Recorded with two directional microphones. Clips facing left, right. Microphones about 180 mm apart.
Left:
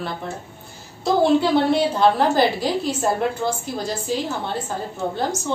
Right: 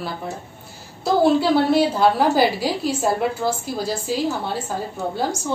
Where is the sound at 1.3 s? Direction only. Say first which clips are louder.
Right 1 dB; 5° right (ahead or behind).